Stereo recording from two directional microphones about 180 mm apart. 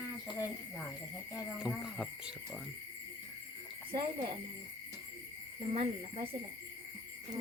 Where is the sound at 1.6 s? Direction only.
5° right (ahead or behind).